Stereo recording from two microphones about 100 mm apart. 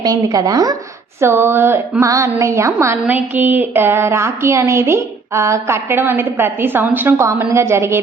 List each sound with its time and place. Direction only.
0.0 s speech: 40° right (ahead or behind)
1.2 s a woman's voice: 25° right (ahead or behind)